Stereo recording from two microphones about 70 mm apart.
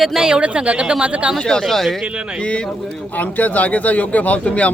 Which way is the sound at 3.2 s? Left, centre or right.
Left.